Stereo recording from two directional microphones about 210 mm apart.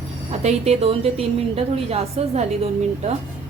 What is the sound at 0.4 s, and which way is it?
A woman's voice, 30° right (ahead or behind).